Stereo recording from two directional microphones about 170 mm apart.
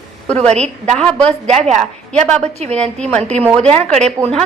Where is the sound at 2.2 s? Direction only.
40° right (ahead or behind).